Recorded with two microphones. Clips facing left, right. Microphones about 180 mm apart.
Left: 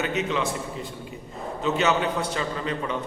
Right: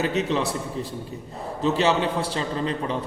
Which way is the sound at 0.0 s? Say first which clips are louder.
Right 3 dB; 35° right (ahead or behind).